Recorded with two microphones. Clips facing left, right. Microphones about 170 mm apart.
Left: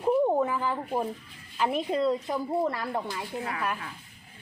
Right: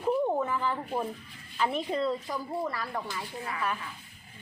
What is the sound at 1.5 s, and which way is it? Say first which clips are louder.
Speech: left 2 dB; 10° left (ahead or behind).